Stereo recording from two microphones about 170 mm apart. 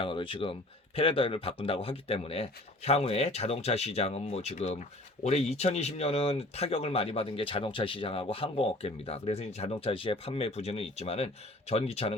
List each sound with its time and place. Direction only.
0.0 s speech: 30° left (ahead or behind)